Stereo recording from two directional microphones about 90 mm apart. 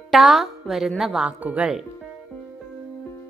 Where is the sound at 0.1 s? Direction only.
Centre (ahead or behind).